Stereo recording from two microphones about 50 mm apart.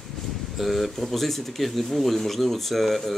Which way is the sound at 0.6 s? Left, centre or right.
Centre.